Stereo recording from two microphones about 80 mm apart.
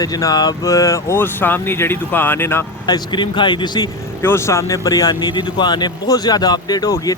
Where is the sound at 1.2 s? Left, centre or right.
Left.